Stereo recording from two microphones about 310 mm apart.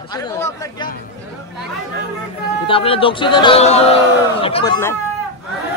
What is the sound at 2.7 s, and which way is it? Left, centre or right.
Speech, centre.